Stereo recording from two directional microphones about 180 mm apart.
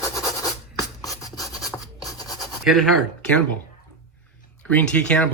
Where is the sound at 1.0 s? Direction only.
20° left (ahead or behind).